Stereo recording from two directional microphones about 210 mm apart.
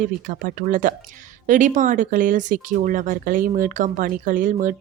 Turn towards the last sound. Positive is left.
turn(degrees=-40)  # may be behind; listen again after turning